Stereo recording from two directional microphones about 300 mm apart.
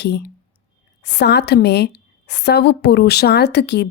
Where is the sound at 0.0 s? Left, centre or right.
Left.